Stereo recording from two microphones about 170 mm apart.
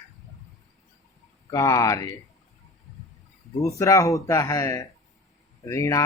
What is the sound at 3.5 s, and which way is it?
Speech, 20° left (ahead or behind).